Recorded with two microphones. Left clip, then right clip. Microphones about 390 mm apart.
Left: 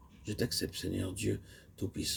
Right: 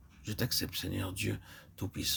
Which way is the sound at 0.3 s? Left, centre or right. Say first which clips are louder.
Even; right.